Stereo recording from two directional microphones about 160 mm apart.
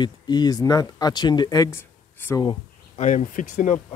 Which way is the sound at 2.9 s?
50° left (ahead or behind).